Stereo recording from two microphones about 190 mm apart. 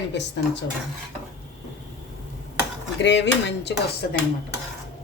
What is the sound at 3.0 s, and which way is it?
Speech, 65° left (ahead or behind).